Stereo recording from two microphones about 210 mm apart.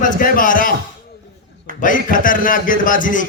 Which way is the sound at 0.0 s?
40° left (ahead or behind).